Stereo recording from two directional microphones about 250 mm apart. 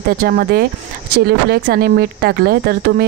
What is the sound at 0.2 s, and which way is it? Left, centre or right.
Speech, right.